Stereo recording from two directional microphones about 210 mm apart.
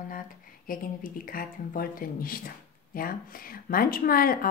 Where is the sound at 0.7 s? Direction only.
40° left (ahead or behind).